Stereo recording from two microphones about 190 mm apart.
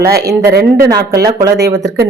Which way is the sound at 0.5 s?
55° right (ahead or behind).